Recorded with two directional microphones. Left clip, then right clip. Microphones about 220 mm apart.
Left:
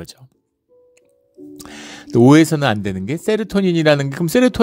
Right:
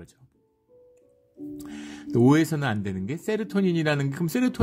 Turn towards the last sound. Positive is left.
turn(degrees=30)  # may be behind; listen again after turning